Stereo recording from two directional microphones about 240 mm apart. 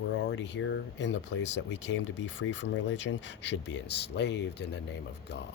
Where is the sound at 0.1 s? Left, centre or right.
Left.